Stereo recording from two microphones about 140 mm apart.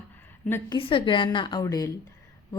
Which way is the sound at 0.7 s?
40° left (ahead or behind).